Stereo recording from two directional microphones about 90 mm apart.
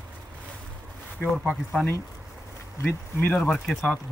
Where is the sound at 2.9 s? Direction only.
20° left (ahead or behind).